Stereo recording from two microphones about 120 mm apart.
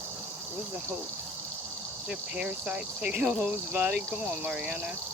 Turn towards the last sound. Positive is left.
turn(degrees=-10)  # may be behind; listen again after turning